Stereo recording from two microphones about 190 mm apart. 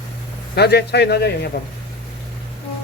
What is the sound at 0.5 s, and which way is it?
Speech, 60° left (ahead or behind).